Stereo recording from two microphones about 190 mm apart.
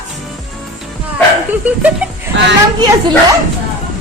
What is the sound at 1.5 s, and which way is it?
Speech, 10° right (ahead or behind).